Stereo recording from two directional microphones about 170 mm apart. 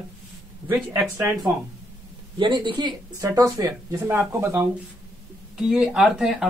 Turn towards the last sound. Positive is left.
turn(degrees=-5)  # may be behind; listen again after turning